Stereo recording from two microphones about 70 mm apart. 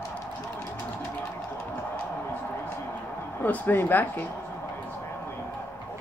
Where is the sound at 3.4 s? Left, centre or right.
Left.